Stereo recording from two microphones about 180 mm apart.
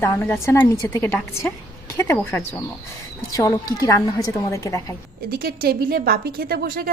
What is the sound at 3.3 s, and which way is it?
A woman's voice, 20° left (ahead or behind).